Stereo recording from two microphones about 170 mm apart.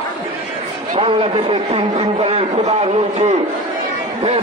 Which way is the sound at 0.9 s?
30° right (ahead or behind).